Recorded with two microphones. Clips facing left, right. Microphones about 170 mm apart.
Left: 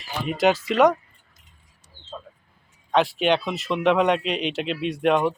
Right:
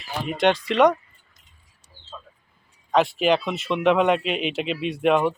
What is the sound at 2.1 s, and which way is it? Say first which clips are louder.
Bird: left 4 dB; 40° left (ahead or behind).